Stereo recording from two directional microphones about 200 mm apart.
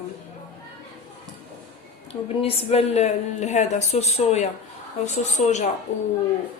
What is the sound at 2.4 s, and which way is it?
Speech, 30° left (ahead or behind).